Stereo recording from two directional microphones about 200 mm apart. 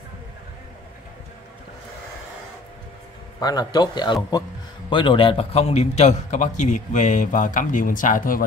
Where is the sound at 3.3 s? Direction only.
20° left (ahead or behind).